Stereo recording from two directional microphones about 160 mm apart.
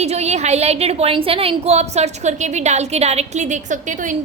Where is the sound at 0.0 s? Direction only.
40° right (ahead or behind).